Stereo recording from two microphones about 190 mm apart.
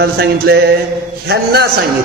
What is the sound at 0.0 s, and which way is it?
A man's voice, 60° right (ahead or behind).